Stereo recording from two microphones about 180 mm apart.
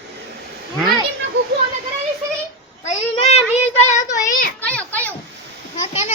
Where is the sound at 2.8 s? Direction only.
35° left (ahead or behind).